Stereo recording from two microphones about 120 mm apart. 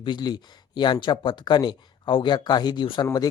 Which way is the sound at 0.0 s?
35° left (ahead or behind).